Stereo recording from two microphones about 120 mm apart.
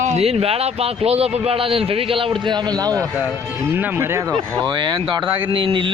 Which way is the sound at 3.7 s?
15° right (ahead or behind).